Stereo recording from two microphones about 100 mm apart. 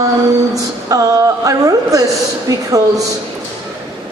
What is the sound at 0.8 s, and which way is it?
Speech, 35° right (ahead or behind).